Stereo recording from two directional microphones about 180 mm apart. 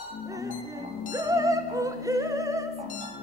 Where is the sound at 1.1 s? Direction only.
20° right (ahead or behind).